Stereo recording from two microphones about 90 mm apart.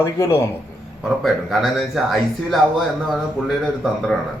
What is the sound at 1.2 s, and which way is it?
Speech, centre (ahead or behind).